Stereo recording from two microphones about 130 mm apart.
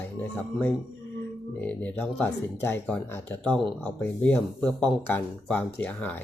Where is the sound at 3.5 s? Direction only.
Centre (ahead or behind).